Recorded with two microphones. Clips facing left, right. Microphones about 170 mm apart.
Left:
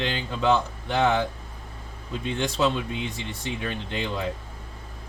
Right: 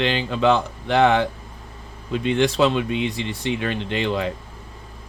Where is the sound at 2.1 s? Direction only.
90° right.